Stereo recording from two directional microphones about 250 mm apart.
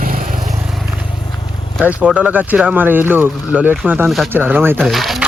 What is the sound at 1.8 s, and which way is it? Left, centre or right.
Speech, centre.